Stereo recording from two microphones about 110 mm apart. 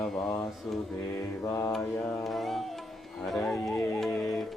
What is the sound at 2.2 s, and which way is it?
Music, centre (ahead or behind).